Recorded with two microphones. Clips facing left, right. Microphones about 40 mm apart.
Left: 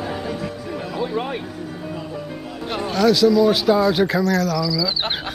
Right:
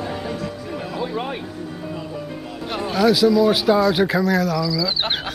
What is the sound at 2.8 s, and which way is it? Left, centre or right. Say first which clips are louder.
Speech: even; centre.